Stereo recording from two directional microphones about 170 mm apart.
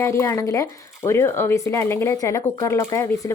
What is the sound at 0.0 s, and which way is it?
Speech, 15° left (ahead or behind).